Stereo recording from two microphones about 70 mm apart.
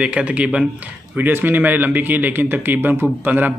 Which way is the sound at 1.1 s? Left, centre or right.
Right.